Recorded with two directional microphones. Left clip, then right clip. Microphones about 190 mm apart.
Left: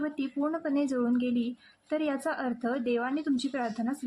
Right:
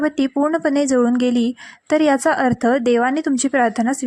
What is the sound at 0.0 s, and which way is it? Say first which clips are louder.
A woman's voice: right 13 dB; 50° right (ahead or behind).